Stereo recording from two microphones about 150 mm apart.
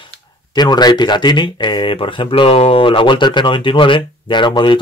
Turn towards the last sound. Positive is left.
turn(degrees=30)  # may be behind; listen again after turning